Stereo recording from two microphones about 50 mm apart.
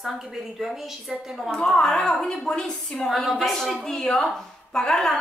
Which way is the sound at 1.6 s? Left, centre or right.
Centre.